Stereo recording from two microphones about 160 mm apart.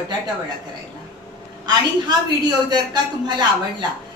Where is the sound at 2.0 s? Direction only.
25° right (ahead or behind).